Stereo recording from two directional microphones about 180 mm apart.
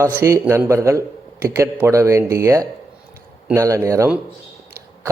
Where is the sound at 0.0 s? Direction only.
15° right (ahead or behind).